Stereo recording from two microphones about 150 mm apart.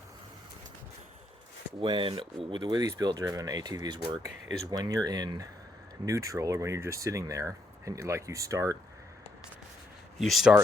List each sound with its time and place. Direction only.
1.8 s speech: 35° right (ahead or behind)
10.2 s speech: centre (ahead or behind)